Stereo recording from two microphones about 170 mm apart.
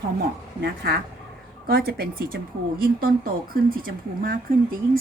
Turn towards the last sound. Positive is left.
turn(degrees=-55)  # may be behind; listen again after turning